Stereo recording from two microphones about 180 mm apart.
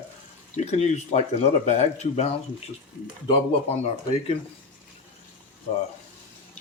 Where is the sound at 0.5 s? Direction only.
40° left (ahead or behind).